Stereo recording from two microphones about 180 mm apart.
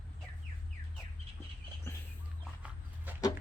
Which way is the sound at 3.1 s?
10° right (ahead or behind).